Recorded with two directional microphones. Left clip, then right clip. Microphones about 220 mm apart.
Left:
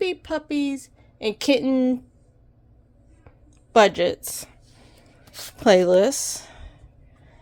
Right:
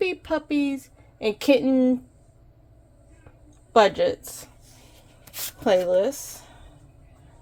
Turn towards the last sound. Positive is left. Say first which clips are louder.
# left 10 dB
turn(degrees=30)  # may be behind; listen again after turning